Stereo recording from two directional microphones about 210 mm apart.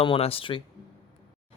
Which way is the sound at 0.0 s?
25° left (ahead or behind).